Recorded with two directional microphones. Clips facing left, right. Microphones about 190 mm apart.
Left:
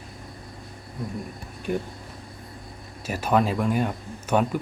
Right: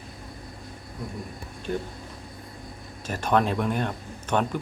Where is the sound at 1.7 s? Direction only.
15° left (ahead or behind).